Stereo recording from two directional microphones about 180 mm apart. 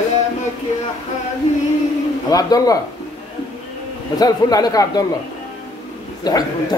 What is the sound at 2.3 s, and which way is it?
Speech, 20° left (ahead or behind).